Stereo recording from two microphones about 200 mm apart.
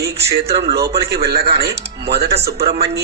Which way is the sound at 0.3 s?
55° right (ahead or behind).